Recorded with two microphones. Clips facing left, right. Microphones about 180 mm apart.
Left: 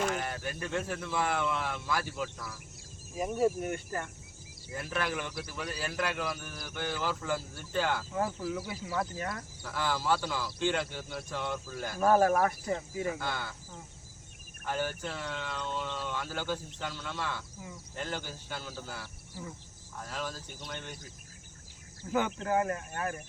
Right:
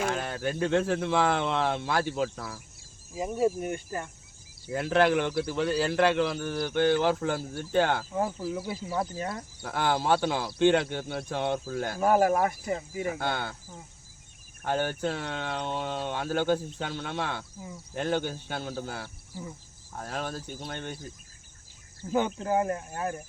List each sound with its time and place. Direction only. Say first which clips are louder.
0.1 s a sound: right 4 dB; 90° right
0.6 s speech: right 10 dB; 85° right
2.0 s speech: right 7 dB; 85° right
3.2 s speech: right 2 dB; 10° right (ahead or behind)
4.7 s speech: right 11 dB; 75° right (ahead or behind)
8.1 s speech: right 3 dB; 25° right (ahead or behind)
9.6 s speech: right 6 dB; 60° right (ahead or behind)
11.9 s speech: right 1 dB; 15° right (ahead or behind)
13.1 s speech: right 5 dB; 60° right (ahead or behind)
14.6 s speech: right 6 dB; 65° right (ahead or behind)
22.4 s speech: right 3 dB; 20° right (ahead or behind)